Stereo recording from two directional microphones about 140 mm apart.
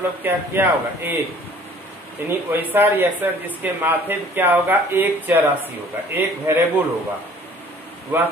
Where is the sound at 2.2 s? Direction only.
15° right (ahead or behind).